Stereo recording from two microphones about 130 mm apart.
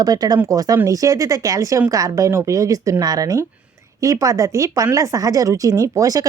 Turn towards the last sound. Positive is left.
turn(degrees=-25)  # may be behind; listen again after turning